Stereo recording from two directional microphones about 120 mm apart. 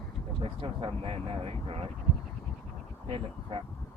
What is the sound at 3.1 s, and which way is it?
Speech, 50° right (ahead or behind).